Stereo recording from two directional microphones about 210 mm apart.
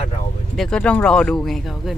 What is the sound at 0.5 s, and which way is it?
Speech, 5° left (ahead or behind).